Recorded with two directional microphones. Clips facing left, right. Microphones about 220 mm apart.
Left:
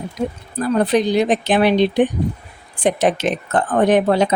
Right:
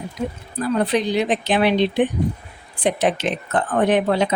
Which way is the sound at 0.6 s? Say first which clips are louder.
Left 3 dB; 45° left (ahead or behind).